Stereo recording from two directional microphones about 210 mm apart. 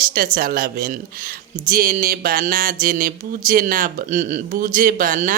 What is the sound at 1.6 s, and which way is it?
Mantra, 40° right (ahead or behind).